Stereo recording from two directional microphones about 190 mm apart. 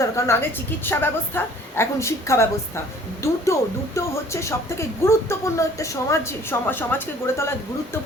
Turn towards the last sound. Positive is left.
turn(degrees=10)  # may be behind; listen again after turning